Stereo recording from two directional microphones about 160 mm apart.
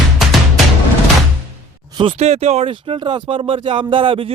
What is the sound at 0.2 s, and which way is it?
Music, centre (ahead or behind).